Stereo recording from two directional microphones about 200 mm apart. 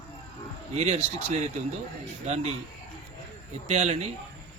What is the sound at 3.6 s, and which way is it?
Speech, 35° right (ahead or behind).